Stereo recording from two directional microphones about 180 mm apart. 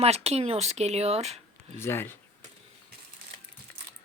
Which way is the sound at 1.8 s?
15° left (ahead or behind).